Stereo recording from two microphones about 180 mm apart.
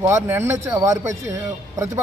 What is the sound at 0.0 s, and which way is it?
Speech, 15° right (ahead or behind).